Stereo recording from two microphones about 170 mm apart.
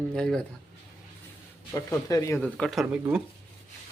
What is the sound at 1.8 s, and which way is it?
Speech, 15° left (ahead or behind).